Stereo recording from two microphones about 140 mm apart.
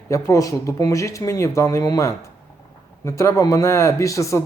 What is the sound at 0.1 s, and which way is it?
Speech, 25° left (ahead or behind).